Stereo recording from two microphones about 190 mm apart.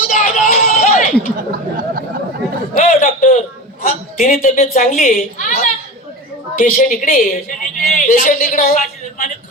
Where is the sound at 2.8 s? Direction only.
40° left (ahead or behind).